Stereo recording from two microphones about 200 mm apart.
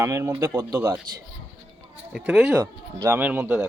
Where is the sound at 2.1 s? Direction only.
5° right (ahead or behind).